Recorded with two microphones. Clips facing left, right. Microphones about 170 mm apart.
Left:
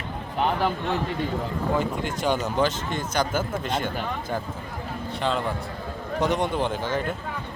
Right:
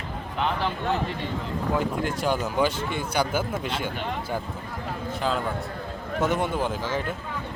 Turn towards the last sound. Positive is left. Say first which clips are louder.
# left 1 dB
turn(degrees=-5)  # may be behind; listen again after turning